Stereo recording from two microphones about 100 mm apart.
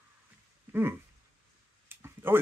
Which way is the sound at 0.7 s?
20° right (ahead or behind).